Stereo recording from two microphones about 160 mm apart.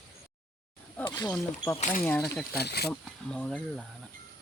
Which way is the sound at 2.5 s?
85° left.